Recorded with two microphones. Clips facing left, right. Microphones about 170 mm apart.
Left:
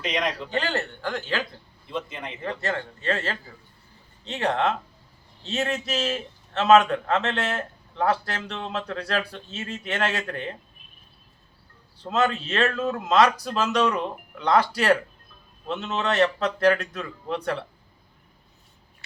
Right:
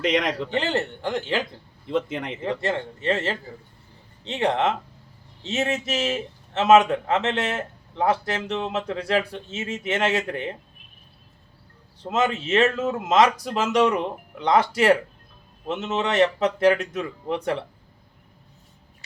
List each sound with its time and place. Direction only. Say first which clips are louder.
0.0 s speech: right 5 dB; 85° right
0.5 s a man's voice: right 3 dB; 20° right (ahead or behind)
1.9 s speech: right 7 dB; 80° right
2.4 s a man's voice: right 2 dB; 20° right (ahead or behind)
12.0 s a man's voice: right 1 dB; 20° right (ahead or behind)